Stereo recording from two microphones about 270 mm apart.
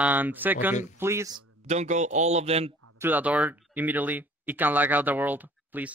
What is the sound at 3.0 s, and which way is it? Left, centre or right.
Speech, centre.